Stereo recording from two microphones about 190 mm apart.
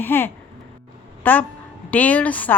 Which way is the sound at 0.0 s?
10° left (ahead or behind).